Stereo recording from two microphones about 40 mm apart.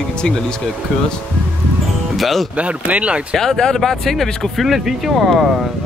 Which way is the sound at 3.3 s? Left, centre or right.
Centre.